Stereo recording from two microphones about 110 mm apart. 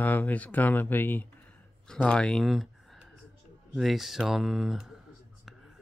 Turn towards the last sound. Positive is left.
turn(degrees=-5)  # may be behind; listen again after turning